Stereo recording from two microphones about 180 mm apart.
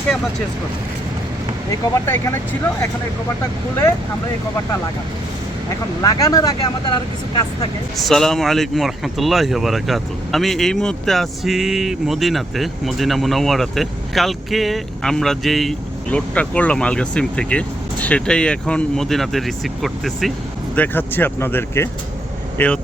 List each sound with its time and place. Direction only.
2.0 s speech: 15° left (ahead or behind)
6.0 s speech: 20° left (ahead or behind)
7.9 s speech: centre (ahead or behind)